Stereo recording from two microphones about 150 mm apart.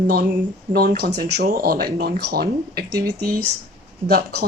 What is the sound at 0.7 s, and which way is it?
Speech, 85° right.